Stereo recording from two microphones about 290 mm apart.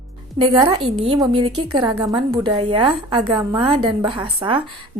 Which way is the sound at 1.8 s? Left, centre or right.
Centre.